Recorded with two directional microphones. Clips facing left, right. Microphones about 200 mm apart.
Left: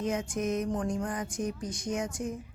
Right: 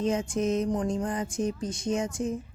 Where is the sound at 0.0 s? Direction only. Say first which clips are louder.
Right 4 dB; 25° right (ahead or behind).